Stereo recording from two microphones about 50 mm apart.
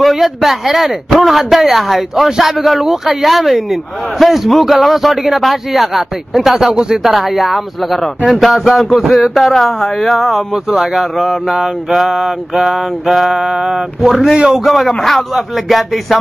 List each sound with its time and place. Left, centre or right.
0.0 s speech: centre
10.5 s speech: centre
11.5 s a sound: centre
14.6 s speech: centre